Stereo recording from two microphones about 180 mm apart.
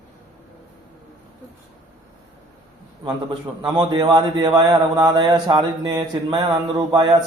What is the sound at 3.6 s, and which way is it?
A man's voice, 25° right (ahead or behind).